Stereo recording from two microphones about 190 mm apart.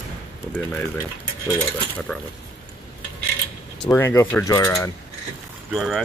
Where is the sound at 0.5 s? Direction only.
10° left (ahead or behind).